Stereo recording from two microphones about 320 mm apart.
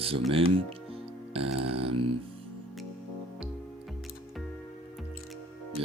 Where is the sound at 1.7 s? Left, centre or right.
Centre.